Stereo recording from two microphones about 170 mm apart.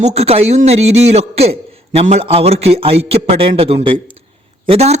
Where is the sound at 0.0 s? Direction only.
40° right (ahead or behind).